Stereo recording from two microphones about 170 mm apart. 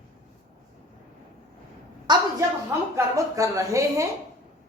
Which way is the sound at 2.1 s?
25° right (ahead or behind).